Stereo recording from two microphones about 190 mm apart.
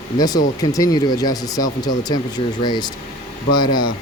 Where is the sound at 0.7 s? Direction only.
20° left (ahead or behind).